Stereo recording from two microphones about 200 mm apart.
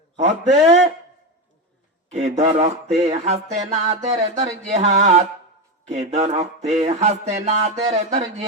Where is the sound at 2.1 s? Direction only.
35° right (ahead or behind).